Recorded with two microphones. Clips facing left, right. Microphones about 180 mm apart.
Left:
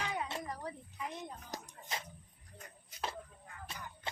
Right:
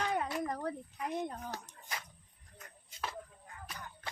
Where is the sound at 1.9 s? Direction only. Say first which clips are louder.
Left 2 dB; 25° left (ahead or behind).